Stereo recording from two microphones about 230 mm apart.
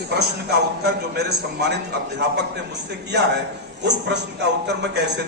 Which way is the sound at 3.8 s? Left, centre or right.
Right.